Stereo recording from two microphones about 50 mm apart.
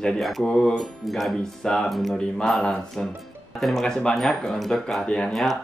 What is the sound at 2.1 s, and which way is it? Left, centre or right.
Speech, centre.